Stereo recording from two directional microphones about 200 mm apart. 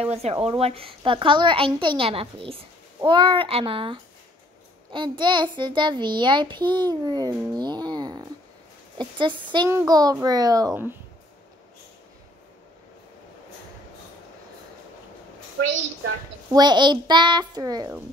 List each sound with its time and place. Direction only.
0.0 s a woman's voice: 30° right (ahead or behind); by 11.0 s 15° right (ahead or behind)
16.5 s a woman's voice: 20° right (ahead or behind)